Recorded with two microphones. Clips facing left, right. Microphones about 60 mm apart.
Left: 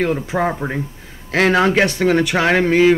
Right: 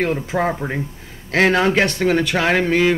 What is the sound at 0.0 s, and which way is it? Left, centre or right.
Speech, centre.